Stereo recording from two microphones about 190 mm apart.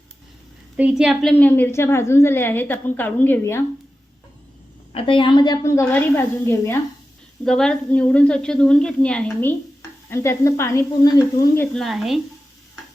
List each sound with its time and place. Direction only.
0.8 s a woman's voice: 5° right (ahead or behind)
4.9 s a woman's voice: 30° left (ahead or behind); by 6.7 s 15° left (ahead or behind)
7.4 s a woman's voice: 5° left (ahead or behind)